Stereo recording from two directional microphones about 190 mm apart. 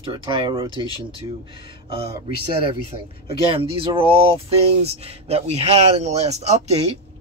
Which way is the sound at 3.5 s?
30° right (ahead or behind).